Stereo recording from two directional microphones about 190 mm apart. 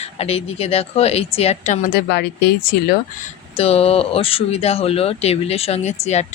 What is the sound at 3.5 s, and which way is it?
Speech, 30° left (ahead or behind).